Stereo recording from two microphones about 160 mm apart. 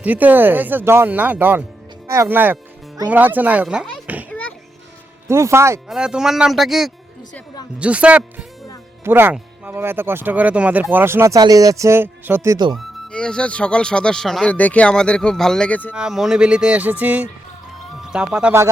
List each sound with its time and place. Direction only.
0.0 s speech: 10° right (ahead or behind)
4.3 s children playing: 10° left (ahead or behind)
5.3 s speech: 15° right (ahead or behind)
5.9 s speech: 5° right (ahead or behind)
12.7 s speech: 5° left (ahead or behind)
15.9 s speech: 5° right (ahead or behind)